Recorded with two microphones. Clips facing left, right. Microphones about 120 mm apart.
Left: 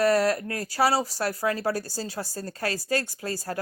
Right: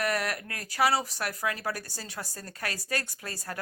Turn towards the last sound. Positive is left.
turn(degrees=30)  # may be behind; listen again after turning